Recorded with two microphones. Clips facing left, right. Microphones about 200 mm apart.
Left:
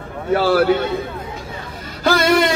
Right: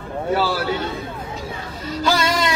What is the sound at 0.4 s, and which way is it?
Speech, 60° left (ahead or behind).